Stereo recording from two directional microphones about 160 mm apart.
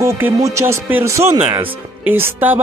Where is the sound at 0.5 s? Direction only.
15° right (ahead or behind).